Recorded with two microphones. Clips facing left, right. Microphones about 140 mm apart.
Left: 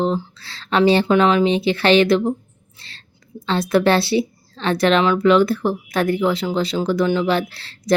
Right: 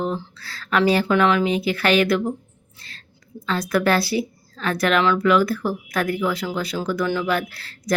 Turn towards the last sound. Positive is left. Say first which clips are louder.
# left 3 dB
turn(degrees=30)  # may be behind; listen again after turning